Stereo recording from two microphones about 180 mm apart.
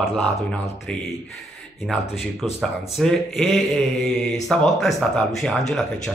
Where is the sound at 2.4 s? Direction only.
35° left (ahead or behind).